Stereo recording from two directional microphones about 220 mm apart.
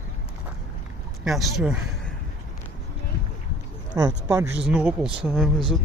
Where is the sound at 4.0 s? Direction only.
15° right (ahead or behind); by 5.8 s centre (ahead or behind).